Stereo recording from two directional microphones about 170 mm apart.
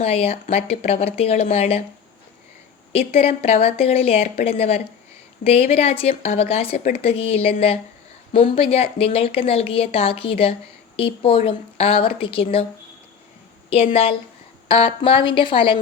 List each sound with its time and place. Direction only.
0.0 s a woman's voice: 35° left (ahead or behind)
3.2 s a woman's voice: 35° left (ahead or behind)
13.9 s a woman's voice: 35° left (ahead or behind)